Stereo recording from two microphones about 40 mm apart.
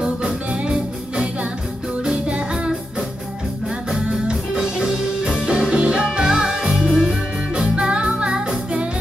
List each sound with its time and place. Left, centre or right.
0.7 s music: right
3.6 s music: centre
6.7 s music: centre
7.5 s music: right